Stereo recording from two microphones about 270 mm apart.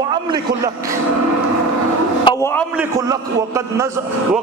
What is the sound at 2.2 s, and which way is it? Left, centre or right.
Speech, centre.